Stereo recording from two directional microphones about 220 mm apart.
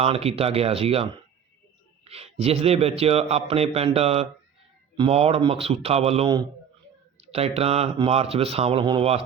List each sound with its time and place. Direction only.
0.0 s a man's voice: 25° right (ahead or behind)
2.0 s a man's voice: 30° right (ahead or behind)